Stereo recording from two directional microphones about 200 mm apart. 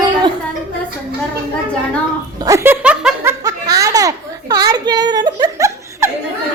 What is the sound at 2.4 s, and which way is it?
Speech, 15° right (ahead or behind).